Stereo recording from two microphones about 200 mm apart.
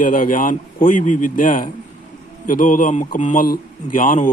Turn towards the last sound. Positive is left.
turn(degrees=40)  # may be behind; listen again after turning